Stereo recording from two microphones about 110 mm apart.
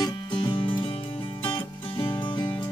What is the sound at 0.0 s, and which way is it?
Music, 45° left (ahead or behind).